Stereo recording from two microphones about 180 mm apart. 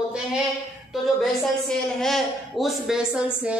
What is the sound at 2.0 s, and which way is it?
Speech, centre (ahead or behind).